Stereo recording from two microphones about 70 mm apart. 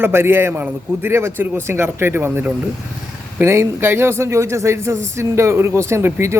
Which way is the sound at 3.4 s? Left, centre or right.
Right.